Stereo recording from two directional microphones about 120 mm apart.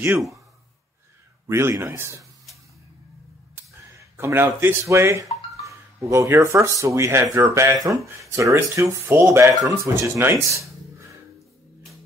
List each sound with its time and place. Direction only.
1.5 s speech: 20° right (ahead or behind)
4.0 s speech: 20° right (ahead or behind)